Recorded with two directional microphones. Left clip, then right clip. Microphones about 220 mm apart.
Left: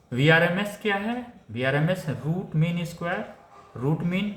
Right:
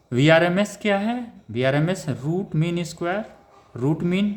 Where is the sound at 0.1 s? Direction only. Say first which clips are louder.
Right 3 dB; 50° right (ahead or behind).